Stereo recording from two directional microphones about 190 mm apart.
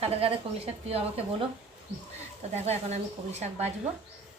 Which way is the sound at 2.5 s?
35° right (ahead or behind).